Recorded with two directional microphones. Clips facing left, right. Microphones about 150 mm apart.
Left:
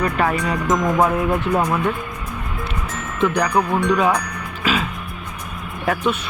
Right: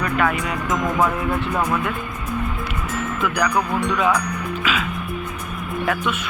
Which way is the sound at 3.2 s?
30° left (ahead or behind).